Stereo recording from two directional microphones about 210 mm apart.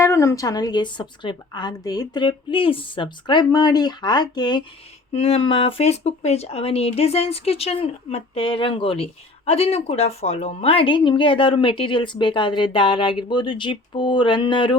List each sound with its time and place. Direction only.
0.0 s a woman's voice: 15° left (ahead or behind)